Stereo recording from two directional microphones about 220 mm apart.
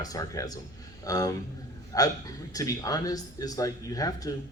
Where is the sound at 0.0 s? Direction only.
15° left (ahead or behind).